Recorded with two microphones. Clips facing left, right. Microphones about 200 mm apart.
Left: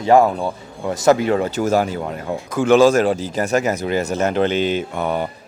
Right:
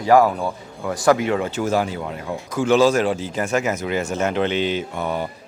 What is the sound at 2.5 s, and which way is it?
Speech, 55° left (ahead or behind).